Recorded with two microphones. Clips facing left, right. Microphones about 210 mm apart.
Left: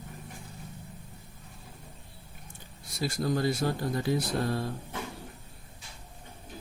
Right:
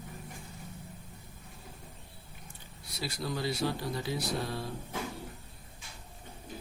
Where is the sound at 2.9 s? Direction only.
45° left (ahead or behind).